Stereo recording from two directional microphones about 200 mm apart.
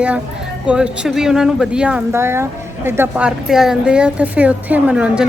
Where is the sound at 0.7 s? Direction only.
5° right (ahead or behind).